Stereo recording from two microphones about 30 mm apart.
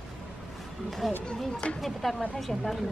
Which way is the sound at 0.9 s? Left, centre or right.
Centre.